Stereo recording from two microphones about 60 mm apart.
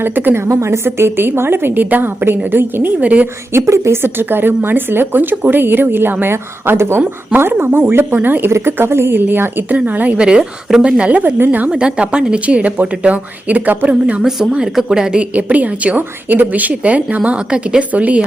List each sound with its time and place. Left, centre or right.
0.0 s a woman's voice: right
0.4 s speech: right
0.9 s a woman's voice: right
3.0 s speech: right
3.5 s a woman's voice: right
10.2 s speech: centre
11.3 s a woman's voice: right
11.8 s speech: centre
14.2 s speech: centre
15.3 s speech: right